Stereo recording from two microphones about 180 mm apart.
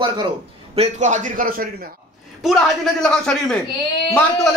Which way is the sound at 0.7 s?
40° right (ahead or behind).